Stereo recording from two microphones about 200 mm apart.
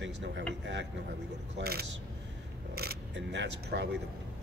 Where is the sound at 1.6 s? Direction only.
50° right (ahead or behind).